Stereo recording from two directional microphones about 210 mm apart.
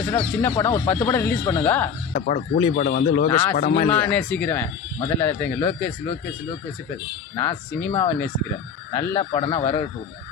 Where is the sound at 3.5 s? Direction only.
40° left (ahead or behind).